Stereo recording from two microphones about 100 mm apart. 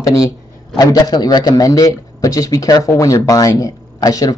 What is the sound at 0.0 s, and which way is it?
Speech, 30° left (ahead or behind).